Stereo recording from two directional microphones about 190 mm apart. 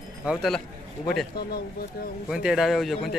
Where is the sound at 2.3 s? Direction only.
Centre (ahead or behind).